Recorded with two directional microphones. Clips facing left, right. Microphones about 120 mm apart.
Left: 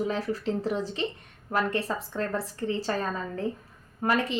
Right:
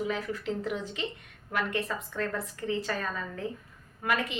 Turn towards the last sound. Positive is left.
turn(degrees=35)  # may be behind; listen again after turning